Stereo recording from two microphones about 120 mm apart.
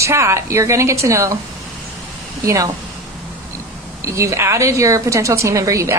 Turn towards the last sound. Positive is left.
turn(degrees=-25)  # may be behind; listen again after turning